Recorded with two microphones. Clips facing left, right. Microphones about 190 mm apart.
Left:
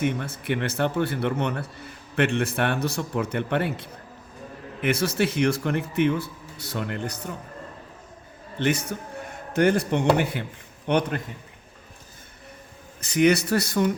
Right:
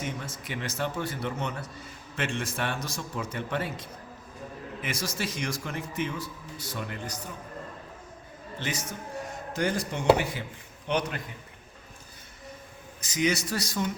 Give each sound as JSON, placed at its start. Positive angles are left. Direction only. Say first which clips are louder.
{"t": 0.0, "sound": "speech", "louder": "left 9 dB", "side_deg": 60}
{"t": 8.5, "sound": "speech", "louder": "left 10 dB", "side_deg": 60}
{"t": 13.0, "sound": "speech", "louder": "left 8 dB", "side_deg": 60}